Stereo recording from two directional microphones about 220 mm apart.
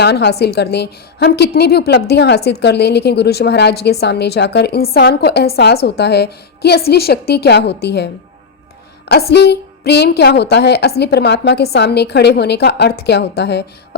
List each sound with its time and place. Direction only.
0.0 s a woman's voice: 50° left (ahead or behind)